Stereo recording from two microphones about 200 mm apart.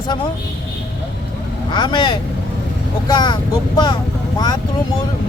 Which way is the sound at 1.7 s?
25° left (ahead or behind).